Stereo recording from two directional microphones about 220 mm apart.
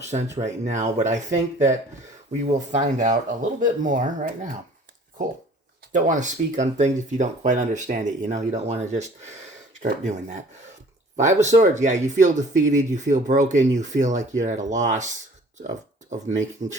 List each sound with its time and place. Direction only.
0.3 s speech: 30° right (ahead or behind)
2.7 s speech: 35° right (ahead or behind)
5.9 s speech: 35° right (ahead or behind)